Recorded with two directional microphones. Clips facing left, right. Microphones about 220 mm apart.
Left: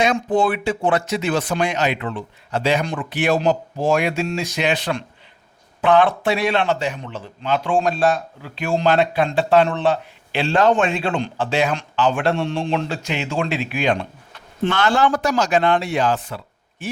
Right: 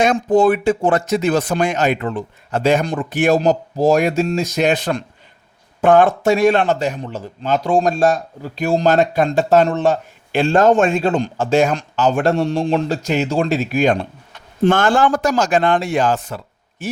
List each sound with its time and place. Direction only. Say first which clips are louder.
0.0 s a man's voice: right 5 dB; 45° right (ahead or behind)